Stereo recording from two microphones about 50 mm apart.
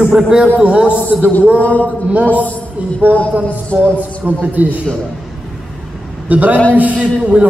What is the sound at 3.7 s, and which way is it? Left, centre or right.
Speech, right.